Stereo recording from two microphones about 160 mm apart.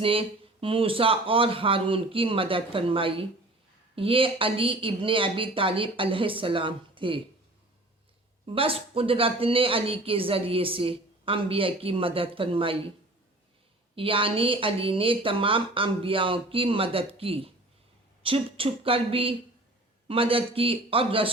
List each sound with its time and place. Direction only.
0.0 s speech: 35° right (ahead or behind)
8.4 s speech: 35° right (ahead or behind)
13.9 s speech: 35° right (ahead or behind)